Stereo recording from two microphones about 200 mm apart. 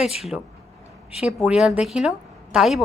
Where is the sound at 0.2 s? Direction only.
Centre (ahead or behind).